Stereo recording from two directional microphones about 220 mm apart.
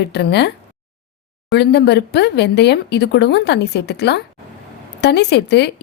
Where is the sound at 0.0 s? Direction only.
50° left (ahead or behind).